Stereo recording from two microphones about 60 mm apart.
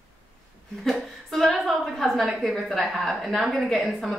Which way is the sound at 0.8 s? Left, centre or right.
Centre.